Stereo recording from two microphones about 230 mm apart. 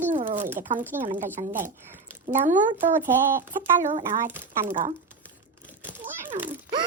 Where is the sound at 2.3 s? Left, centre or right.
Right.